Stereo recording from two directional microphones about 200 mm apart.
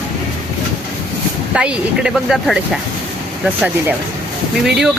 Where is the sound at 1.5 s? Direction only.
5° right (ahead or behind).